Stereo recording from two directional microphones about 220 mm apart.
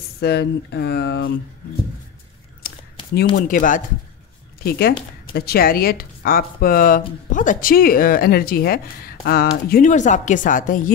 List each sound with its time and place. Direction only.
0.2 s speech: 50° left (ahead or behind)
3.3 s speech: 35° left (ahead or behind)